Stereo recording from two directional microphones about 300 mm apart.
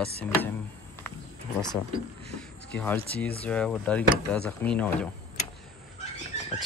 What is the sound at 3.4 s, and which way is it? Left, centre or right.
Speech, centre.